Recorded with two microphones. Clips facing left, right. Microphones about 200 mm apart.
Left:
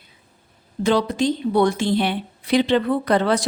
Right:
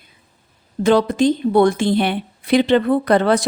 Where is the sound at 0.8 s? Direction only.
50° right (ahead or behind).